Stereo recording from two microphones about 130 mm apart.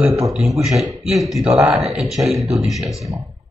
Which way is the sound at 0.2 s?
Centre (ahead or behind).